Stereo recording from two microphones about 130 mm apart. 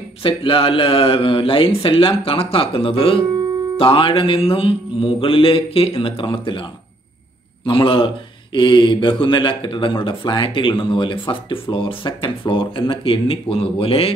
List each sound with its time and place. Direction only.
0.2 s speech: 45° left (ahead or behind)
7.6 s speech: 40° left (ahead or behind)